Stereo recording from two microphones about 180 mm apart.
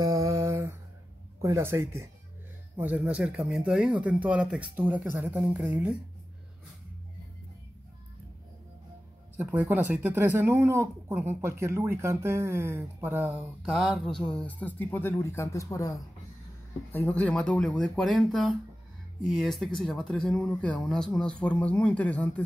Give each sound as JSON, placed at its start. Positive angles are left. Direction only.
{"t": 0.0, "sound": "a sound", "side_deg": -20}
{"t": 1.4, "sound": "speech", "side_deg": -15}
{"t": 9.4, "sound": "speech", "side_deg": -10}